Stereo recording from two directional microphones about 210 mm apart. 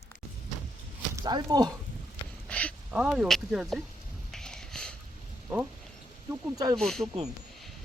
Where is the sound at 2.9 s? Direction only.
5° right (ahead or behind).